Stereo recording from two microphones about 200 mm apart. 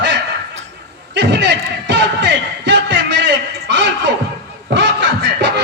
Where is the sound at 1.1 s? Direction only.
60° right (ahead or behind).